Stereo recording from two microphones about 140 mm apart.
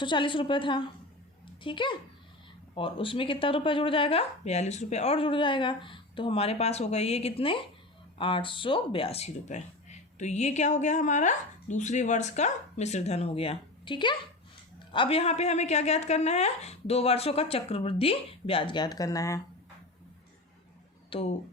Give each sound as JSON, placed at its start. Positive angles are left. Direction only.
{"t": 0.0, "sound": "speech", "side_deg": 35}
{"t": 21.1, "sound": "speech", "side_deg": 45}